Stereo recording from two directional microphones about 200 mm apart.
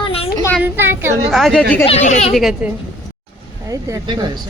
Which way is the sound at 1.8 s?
35° left (ahead or behind).